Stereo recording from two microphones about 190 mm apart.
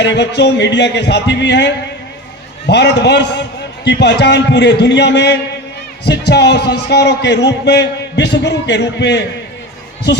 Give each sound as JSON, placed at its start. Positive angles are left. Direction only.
{"t": 0.0, "sound": "a man's voice", "side_deg": 65}